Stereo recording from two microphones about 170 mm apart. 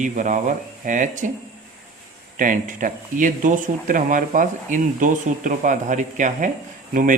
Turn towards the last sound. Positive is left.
turn(degrees=-50)  # may be behind; listen again after turning